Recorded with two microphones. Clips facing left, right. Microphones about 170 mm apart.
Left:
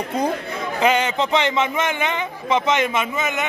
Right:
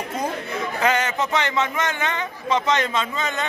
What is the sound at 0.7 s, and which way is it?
A man's voice, 20° left (ahead or behind).